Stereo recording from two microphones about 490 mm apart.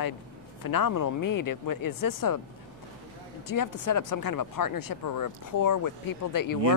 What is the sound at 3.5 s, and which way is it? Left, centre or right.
Speech, left.